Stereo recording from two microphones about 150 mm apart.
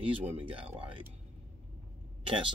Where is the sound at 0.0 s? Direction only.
40° right (ahead or behind).